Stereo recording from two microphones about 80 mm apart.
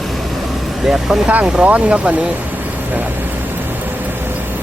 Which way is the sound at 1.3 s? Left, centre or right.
Centre.